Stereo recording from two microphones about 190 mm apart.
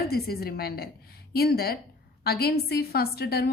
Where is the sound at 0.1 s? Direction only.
55° left (ahead or behind).